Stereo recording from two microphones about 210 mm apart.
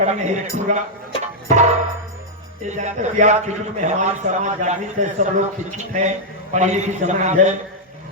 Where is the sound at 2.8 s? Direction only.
35° right (ahead or behind).